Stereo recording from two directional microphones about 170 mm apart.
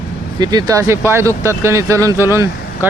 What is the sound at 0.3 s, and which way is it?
Speech, 25° right (ahead or behind).